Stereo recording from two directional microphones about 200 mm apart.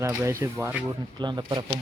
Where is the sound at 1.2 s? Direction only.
20° right (ahead or behind).